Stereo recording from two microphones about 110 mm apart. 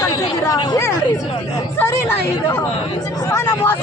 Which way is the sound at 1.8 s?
25° left (ahead or behind).